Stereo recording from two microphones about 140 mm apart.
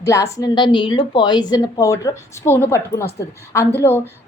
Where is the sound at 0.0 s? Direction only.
20° left (ahead or behind).